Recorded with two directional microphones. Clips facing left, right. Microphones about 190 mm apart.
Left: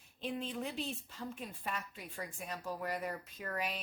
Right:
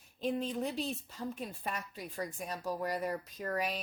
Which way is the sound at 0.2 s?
40° right (ahead or behind).